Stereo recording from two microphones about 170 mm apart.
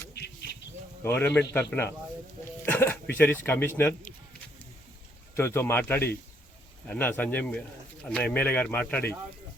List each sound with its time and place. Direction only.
1.0 s a man's voice: 10° left (ahead or behind)
2.4 s a sound: 10° left (ahead or behind)
5.4 s a man's voice: 15° left (ahead or behind)